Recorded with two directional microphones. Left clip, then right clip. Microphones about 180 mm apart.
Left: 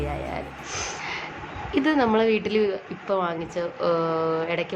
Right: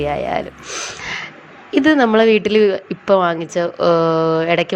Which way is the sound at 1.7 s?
35° right (ahead or behind).